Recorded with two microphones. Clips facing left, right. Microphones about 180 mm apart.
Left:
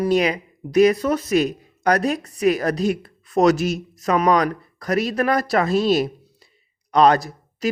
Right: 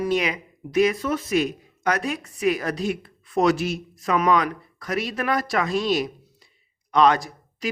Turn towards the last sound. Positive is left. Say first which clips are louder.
# left 5 dB
turn(degrees=40)  # may be behind; listen again after turning